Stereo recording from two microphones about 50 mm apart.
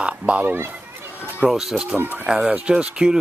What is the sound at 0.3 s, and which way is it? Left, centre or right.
Speech, right.